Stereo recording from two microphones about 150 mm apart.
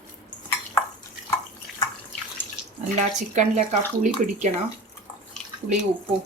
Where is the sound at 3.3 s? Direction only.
55° right (ahead or behind).